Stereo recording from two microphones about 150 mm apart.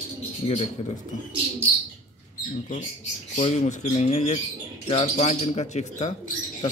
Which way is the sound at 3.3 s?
50° left (ahead or behind).